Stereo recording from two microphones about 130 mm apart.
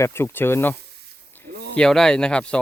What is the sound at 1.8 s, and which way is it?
Speech, 5° left (ahead or behind).